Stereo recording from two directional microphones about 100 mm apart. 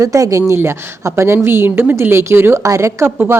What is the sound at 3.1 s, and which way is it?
Speech, 15° right (ahead or behind).